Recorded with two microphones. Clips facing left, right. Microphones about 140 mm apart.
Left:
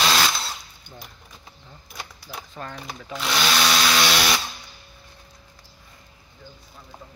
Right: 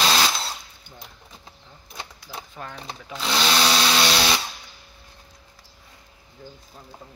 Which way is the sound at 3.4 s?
30° right (ahead or behind).